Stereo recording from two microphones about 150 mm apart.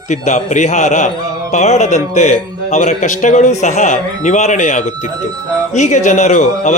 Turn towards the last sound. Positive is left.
turn(degrees=55)  # may be behind; listen again after turning